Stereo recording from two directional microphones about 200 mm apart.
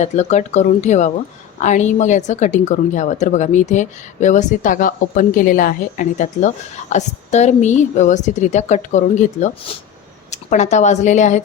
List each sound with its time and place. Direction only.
0.0 s a woman's voice: 35° left (ahead or behind)